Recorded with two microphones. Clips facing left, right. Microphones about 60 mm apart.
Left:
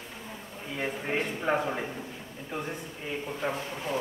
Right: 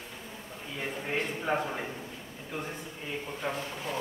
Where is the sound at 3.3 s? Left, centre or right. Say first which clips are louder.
Left 3 dB; centre.